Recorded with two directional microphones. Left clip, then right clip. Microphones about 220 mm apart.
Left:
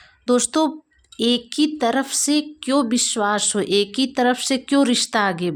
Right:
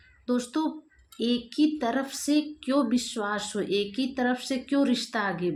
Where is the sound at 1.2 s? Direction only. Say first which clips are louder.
Left 7 dB; 50° left (ahead or behind).